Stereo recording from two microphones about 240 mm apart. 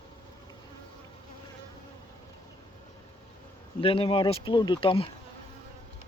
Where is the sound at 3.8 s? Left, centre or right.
Left.